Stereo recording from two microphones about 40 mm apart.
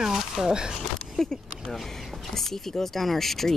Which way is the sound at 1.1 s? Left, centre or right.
Centre.